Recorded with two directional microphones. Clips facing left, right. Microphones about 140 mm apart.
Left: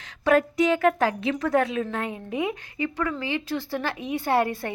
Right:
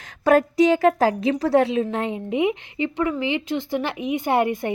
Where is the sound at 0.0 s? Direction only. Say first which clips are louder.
Right 3 dB; 40° right (ahead or behind).